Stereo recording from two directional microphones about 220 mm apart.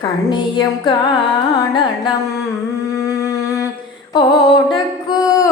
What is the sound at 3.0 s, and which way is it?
Music, 15° left (ahead or behind).